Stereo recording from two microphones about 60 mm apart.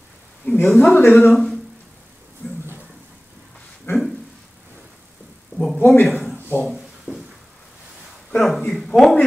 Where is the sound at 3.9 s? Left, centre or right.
Left.